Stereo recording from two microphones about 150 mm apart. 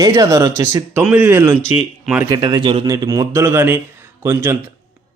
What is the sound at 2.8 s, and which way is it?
Speech, 25° right (ahead or behind).